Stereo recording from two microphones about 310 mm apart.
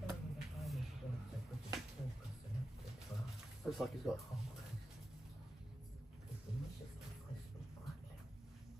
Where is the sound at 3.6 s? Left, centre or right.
Centre.